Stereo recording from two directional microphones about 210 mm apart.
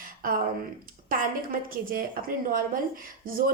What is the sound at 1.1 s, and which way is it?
A woman's voice, 40° right (ahead or behind).